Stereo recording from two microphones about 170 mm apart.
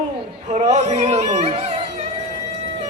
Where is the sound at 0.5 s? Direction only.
40° right (ahead or behind).